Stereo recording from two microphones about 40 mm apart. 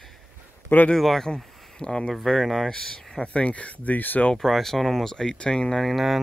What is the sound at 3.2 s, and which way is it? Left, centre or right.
Speech, left.